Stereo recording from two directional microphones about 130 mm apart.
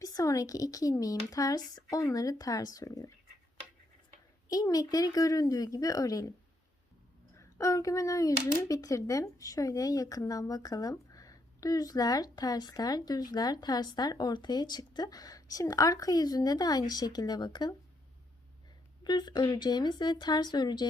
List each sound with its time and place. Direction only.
0.0 s speech: 25° left (ahead or behind)
4.4 s speech: 25° left (ahead or behind)
7.3 s speech: 25° left (ahead or behind)
19.0 s speech: 35° left (ahead or behind)